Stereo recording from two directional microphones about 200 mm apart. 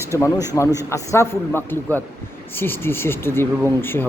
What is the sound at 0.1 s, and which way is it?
Speech, 15° left (ahead or behind).